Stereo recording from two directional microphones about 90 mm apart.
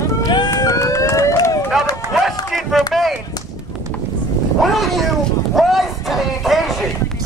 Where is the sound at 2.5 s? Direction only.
Centre (ahead or behind).